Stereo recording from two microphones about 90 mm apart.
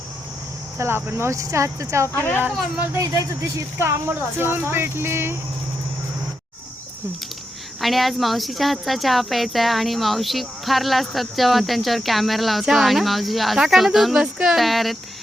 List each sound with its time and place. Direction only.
0.8 s speech: 25° right (ahead or behind)
2.1 s speech: 25° left (ahead or behind)
2.9 s speech: 40° right (ahead or behind)
3.8 s speech: 25° right (ahead or behind)
7.8 s speech: centre (ahead or behind)